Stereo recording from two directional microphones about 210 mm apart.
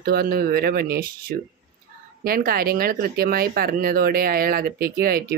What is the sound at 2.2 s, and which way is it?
Speech, 45° right (ahead or behind).